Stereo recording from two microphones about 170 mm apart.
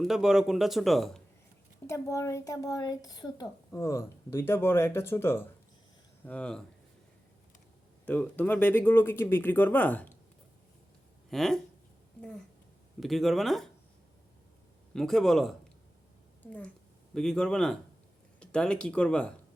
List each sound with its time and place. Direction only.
0.0 s speech: 5° right (ahead or behind)
1.9 s speech: 15° left (ahead or behind)
8.0 s speech: 10° left (ahead or behind)
11.3 s speech: centre (ahead or behind)
13.0 s speech: centre (ahead or behind)
14.9 s speech: centre (ahead or behind)